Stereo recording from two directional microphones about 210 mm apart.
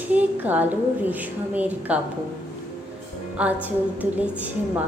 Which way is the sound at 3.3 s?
5° right (ahead or behind).